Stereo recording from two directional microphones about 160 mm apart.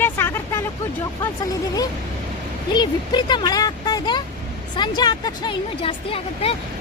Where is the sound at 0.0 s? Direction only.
15° left (ahead or behind).